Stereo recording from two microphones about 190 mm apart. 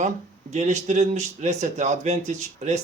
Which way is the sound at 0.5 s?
35° right (ahead or behind).